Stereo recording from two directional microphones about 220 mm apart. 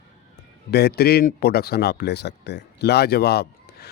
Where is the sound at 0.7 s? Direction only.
45° left (ahead or behind).